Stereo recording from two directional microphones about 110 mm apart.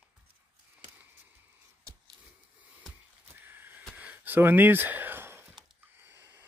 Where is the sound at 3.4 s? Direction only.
20° right (ahead or behind).